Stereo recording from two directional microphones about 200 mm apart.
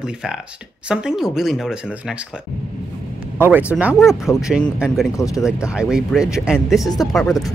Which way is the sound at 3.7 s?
5° right (ahead or behind).